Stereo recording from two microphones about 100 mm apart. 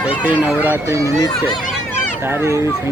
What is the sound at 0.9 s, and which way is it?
Speech, 30° right (ahead or behind).